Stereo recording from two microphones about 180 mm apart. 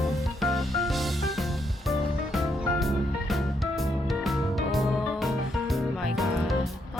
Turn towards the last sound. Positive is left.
turn(degrees=0)  # may be behind; listen again after turning